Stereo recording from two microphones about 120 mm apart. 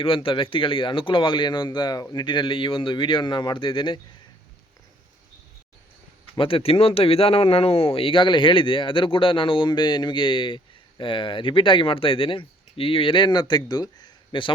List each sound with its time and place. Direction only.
0.0 s a man's voice: 45° left (ahead or behind)
6.3 s speech: 50° left (ahead or behind)